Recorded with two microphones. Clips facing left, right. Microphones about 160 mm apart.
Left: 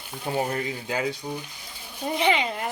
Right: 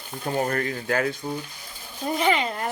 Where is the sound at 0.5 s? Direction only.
10° left (ahead or behind).